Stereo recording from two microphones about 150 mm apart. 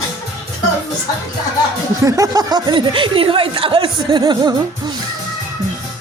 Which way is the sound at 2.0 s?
20° right (ahead or behind).